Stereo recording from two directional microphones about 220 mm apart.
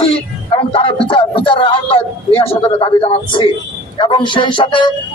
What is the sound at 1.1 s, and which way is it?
A man's voice, 25° left (ahead or behind).